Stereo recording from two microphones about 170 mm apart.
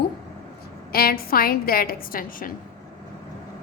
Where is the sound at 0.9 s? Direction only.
60° left (ahead or behind).